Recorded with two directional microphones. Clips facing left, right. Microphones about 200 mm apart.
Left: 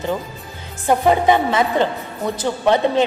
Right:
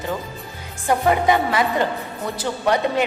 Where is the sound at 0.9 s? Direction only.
25° left (ahead or behind).